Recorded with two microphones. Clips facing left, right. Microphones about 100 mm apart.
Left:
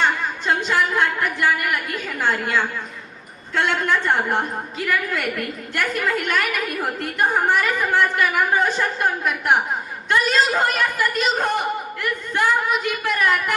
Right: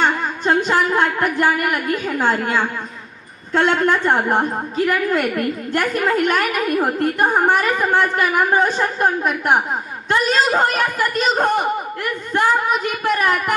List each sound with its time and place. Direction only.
0.0 s a woman's voice: 40° right (ahead or behind)
12.9 s a woman's voice: 35° right (ahead or behind)